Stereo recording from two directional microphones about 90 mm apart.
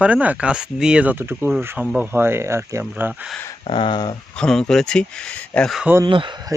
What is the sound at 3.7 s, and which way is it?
Speech, 70° left (ahead or behind).